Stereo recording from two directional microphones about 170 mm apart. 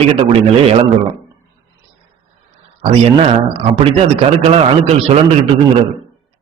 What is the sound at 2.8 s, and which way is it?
A man's voice, 40° right (ahead or behind).